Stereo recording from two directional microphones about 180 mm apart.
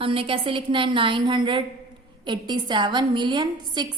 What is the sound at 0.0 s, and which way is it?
A woman's voice, 30° right (ahead or behind).